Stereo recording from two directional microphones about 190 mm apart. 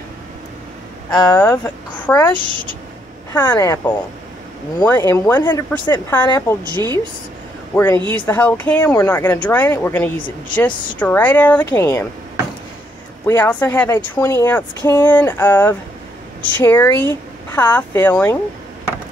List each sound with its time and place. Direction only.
1.1 s speech: 15° left (ahead or behind)
3.3 s speech: 15° left (ahead or behind)
7.7 s speech: 10° left (ahead or behind)
13.3 s speech: 10° left (ahead or behind)